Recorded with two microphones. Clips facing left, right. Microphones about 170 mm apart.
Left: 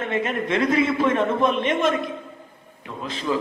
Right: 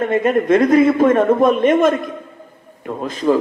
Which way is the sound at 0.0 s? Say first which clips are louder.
Right 9 dB; 45° right (ahead or behind).